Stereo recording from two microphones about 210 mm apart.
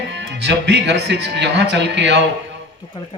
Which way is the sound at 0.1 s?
55° right (ahead or behind).